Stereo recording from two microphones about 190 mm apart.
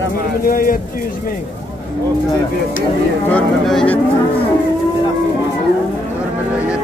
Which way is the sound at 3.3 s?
5° left (ahead or behind).